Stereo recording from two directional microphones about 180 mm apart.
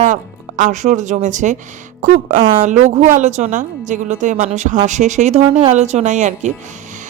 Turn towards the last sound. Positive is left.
turn(degrees=-40)  # may be behind; listen again after turning